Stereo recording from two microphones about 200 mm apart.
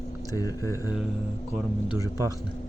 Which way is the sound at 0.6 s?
15° right (ahead or behind).